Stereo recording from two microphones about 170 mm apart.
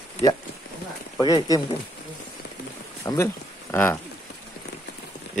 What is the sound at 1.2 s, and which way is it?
Speech, 20° left (ahead or behind).